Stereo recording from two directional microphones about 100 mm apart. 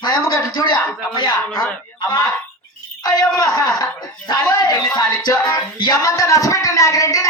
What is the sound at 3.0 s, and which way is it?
Speech, 40° left (ahead or behind).